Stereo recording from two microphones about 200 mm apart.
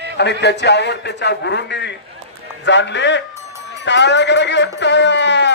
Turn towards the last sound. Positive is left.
turn(degrees=60)  # may be behind; listen again after turning